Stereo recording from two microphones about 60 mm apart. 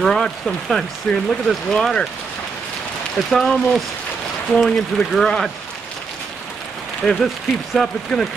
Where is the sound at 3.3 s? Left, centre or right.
Centre.